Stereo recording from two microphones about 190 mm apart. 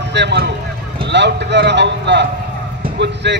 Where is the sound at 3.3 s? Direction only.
65° right (ahead or behind).